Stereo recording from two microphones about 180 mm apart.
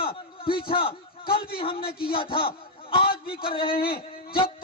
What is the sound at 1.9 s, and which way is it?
Speech, 55° left (ahead or behind).